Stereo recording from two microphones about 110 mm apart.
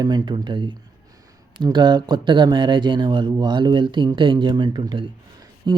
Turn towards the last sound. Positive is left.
turn(degrees=-40)  # may be behind; listen again after turning